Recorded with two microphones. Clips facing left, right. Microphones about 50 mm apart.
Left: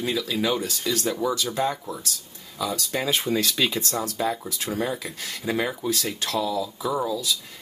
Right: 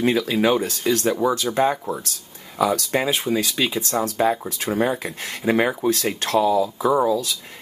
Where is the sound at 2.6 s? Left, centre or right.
Right.